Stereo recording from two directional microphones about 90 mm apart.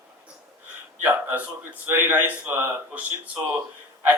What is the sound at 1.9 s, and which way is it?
Speech, 25° right (ahead or behind).